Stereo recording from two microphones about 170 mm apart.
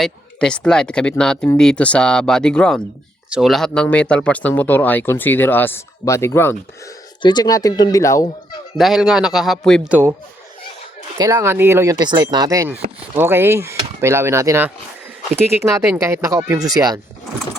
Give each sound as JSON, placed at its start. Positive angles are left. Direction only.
{"t": 0.0, "sound": "speech", "side_deg": 5}
{"t": 7.2, "sound": "speech", "side_deg": 25}
{"t": 8.8, "sound": "speech", "side_deg": -5}
{"t": 9.9, "sound": "speech", "side_deg": -15}
{"t": 11.2, "sound": "speech", "side_deg": -20}
{"t": 12.0, "sound": "speech", "side_deg": -25}
{"t": 15.9, "sound": "speech", "side_deg": -15}